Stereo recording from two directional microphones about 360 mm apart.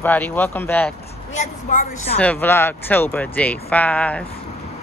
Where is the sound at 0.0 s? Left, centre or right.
Centre.